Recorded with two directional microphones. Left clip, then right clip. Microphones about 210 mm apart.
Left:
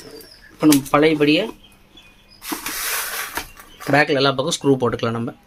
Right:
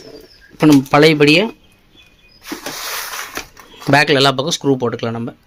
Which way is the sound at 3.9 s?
40° right (ahead or behind).